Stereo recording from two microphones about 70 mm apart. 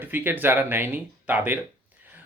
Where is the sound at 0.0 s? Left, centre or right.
Right.